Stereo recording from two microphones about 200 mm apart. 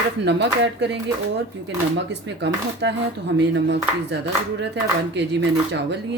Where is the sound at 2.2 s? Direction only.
65° right (ahead or behind).